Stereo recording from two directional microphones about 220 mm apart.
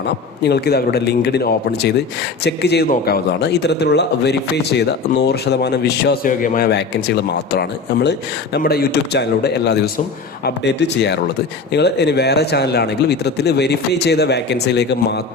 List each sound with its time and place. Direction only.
0.4 s a man's voice: 45° left (ahead or behind)